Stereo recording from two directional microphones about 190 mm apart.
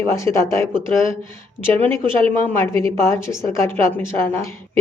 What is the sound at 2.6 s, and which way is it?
A woman's voice, 15° left (ahead or behind).